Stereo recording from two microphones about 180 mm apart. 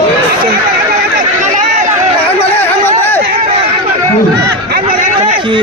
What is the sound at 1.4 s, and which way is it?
Run, 45° right (ahead or behind).